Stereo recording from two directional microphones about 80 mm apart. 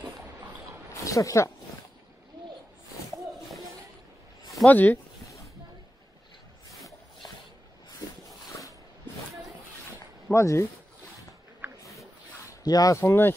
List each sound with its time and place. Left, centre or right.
1.0 s speech: left
4.6 s speech: centre
6.8 s a sound: centre
10.3 s speech: left
12.4 s a sound: left
13.0 s speech: left